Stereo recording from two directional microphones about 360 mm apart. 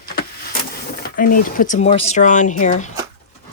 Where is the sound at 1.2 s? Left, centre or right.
Left.